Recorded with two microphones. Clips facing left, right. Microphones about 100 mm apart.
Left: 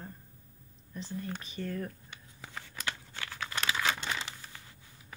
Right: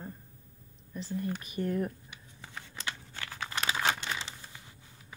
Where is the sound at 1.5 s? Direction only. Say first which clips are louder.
Right 7 dB; 20° right (ahead or behind).